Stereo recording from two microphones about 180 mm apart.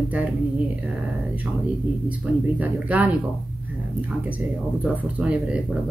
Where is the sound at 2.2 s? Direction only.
10° right (ahead or behind).